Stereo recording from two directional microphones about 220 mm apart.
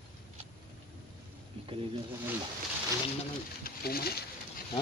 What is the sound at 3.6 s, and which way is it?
Speech, 45° left (ahead or behind).